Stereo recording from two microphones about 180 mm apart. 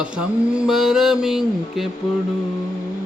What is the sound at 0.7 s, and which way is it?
Speech, centre (ahead or behind).